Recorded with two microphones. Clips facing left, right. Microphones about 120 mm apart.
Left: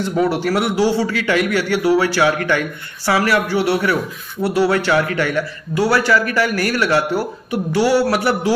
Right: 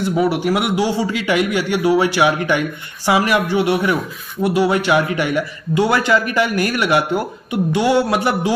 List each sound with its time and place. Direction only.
0.0 s a man's voice: 10° right (ahead or behind)